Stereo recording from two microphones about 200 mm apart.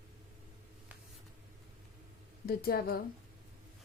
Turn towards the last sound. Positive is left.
turn(degrees=50)  # may be behind; listen again after turning